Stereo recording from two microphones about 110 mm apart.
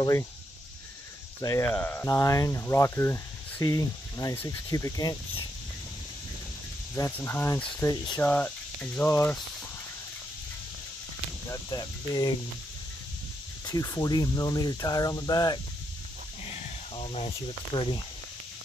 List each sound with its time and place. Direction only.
0.0 s speech: 25° left (ahead or behind)
1.4 s speech: 30° left (ahead or behind)
1.7 s speech: 15° left (ahead or behind)
2.0 s speech: 30° left (ahead or behind)
3.6 s speech: 35° left (ahead or behind)
7.1 s speech: 15° left (ahead or behind)
7.9 s speech: 40° left (ahead or behind)
8.2 s speech: 15° left (ahead or behind)
11.7 s speech: 35° left (ahead or behind)
13.7 s speech: 35° left (ahead or behind)
16.9 s a sound: 60° left (ahead or behind)
17.7 s speech: 45° left (ahead or behind)